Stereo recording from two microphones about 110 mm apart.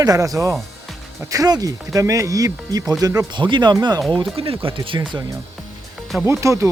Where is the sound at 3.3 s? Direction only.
45° right (ahead or behind).